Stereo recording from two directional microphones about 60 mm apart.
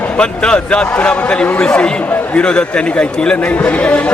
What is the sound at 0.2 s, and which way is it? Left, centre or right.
Speech, centre.